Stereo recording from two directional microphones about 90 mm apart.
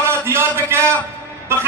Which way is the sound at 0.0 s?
25° right (ahead or behind).